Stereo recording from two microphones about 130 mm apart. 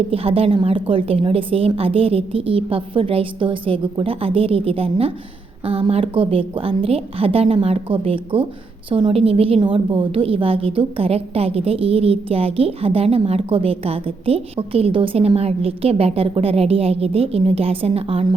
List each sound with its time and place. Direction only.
0.1 s a woman's voice: 45° right (ahead or behind)